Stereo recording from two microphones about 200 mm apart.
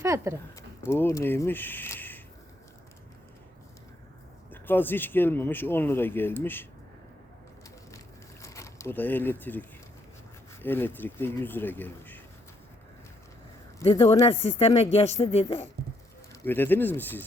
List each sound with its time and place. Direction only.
0.0 s speech: 15° right (ahead or behind)
0.5 s speech: 10° left (ahead or behind)
4.5 s speech: 10° left (ahead or behind)
7.9 s a sound: 15° left (ahead or behind)
9.4 s speech: 10° left (ahead or behind)
13.9 s speech: 20° left (ahead or behind)
16.3 s speech: 10° left (ahead or behind)